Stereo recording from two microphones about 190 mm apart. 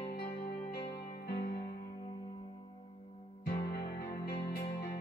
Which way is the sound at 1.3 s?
60° left (ahead or behind).